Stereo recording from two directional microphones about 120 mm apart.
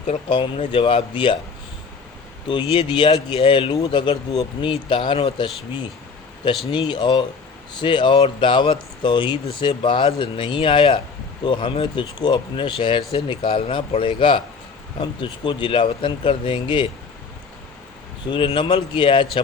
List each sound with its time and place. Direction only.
0.3 s speech: 40° left (ahead or behind)
2.5 s speech: 40° left (ahead or behind)
4.1 s speech: 55° left (ahead or behind)
6.7 s speech: 45° left (ahead or behind)
18.3 s speech: 45° left (ahead or behind)